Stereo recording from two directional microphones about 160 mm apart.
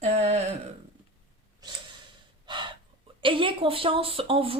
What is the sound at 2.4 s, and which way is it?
Gasp, 30° right (ahead or behind).